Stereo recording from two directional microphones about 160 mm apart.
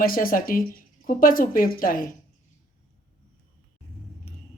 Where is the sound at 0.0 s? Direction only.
60° left (ahead or behind).